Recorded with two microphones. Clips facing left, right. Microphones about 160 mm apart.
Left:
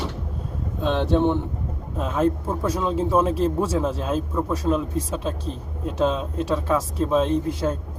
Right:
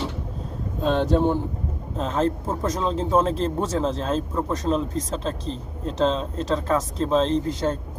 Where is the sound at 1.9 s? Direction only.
10° left (ahead or behind).